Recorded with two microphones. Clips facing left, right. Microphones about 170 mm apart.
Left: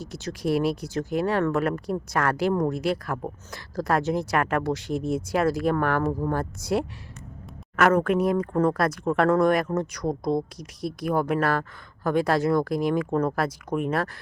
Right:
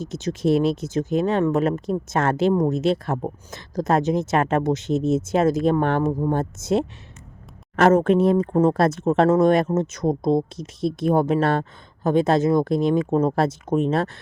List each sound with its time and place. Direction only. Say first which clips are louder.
0.0 s speech: right 6 dB; 20° right (ahead or behind)